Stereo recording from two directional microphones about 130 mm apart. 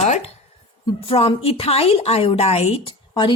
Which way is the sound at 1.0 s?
45° left (ahead or behind).